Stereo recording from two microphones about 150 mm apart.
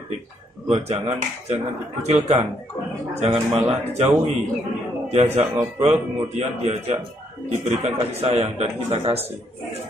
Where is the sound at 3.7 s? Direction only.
45° right (ahead or behind).